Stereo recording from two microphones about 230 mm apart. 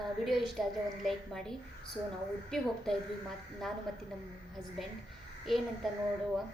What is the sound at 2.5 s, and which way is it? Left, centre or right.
Speech, centre.